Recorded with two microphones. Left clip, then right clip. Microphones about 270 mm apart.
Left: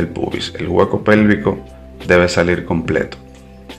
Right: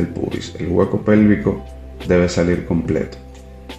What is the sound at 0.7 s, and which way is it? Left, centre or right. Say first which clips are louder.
Speech: left 3 dB; left.